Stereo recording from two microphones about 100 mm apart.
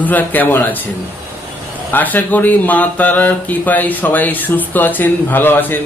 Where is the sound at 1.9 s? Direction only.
15° left (ahead or behind).